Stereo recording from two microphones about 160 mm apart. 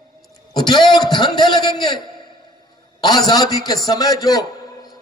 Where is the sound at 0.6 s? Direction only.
25° left (ahead or behind).